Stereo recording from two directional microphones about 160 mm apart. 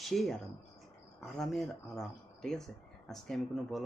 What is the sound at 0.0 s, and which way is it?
Speech, centre (ahead or behind).